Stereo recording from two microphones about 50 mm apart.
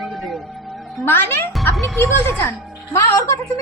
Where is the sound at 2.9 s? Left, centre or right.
Left.